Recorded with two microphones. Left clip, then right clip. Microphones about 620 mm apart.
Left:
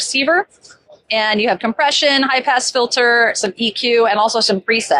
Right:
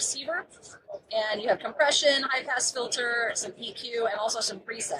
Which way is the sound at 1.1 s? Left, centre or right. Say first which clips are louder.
Left 11 dB; left.